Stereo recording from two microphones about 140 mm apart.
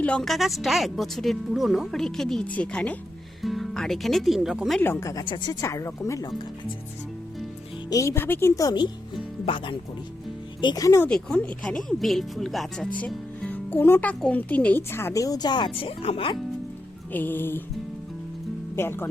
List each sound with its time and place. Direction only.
0.0 s a woman's voice: 5° left (ahead or behind)
4.8 s a woman's voice: 15° left (ahead or behind)
7.9 s a woman's voice: 20° left (ahead or behind)
11.1 s speech: 5° left (ahead or behind); by 16.4 s 40° left (ahead or behind)
17.1 s speech: 15° left (ahead or behind)
18.8 s speech: 15° left (ahead or behind)